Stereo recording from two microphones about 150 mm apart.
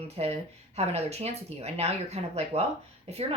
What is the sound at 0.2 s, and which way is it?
A woman's voice, 40° right (ahead or behind).